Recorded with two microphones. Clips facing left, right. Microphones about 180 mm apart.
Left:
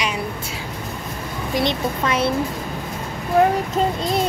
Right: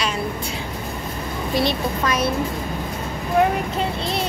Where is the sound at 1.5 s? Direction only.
20° left (ahead or behind).